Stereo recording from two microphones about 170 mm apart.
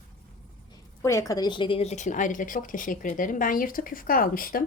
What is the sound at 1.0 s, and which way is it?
Speech, 20° left (ahead or behind).